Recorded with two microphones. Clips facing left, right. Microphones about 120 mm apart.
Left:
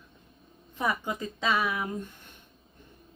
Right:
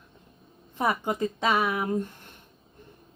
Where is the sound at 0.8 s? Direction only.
55° right (ahead or behind).